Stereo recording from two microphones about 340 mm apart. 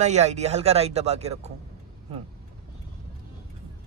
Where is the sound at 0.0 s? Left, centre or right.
Centre.